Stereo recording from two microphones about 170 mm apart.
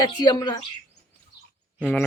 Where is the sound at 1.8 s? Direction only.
5° left (ahead or behind).